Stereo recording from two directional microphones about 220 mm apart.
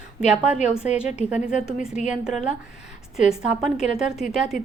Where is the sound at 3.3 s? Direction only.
Centre (ahead or behind).